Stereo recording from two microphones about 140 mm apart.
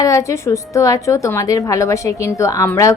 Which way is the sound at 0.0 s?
20° left (ahead or behind).